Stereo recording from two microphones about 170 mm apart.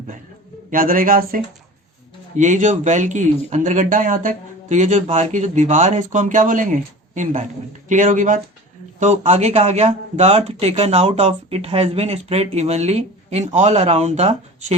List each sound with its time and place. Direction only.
0.7 s a man's voice: 55° right (ahead or behind)
2.3 s speech: 45° right (ahead or behind)